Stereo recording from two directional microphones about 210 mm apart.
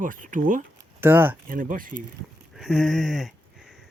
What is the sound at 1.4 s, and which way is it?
Speech, 40° right (ahead or behind).